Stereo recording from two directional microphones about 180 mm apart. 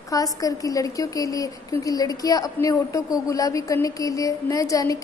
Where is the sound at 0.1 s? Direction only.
20° left (ahead or behind).